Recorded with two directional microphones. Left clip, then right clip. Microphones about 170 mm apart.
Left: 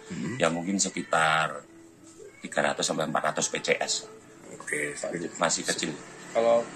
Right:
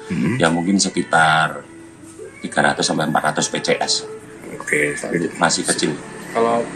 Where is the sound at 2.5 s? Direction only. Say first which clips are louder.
Right 9 dB; 5° left (ahead or behind).